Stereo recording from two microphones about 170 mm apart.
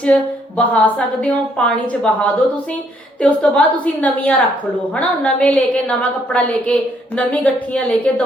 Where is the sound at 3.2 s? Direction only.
5° left (ahead or behind).